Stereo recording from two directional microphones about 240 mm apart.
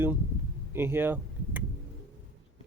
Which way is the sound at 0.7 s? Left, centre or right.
Centre.